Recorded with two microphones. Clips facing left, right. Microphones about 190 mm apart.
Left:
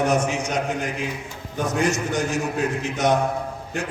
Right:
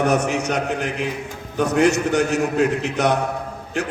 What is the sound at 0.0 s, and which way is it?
A man's voice, 60° right (ahead or behind).